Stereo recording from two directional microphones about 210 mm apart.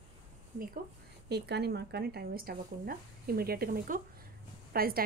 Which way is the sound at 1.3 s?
50° right (ahead or behind).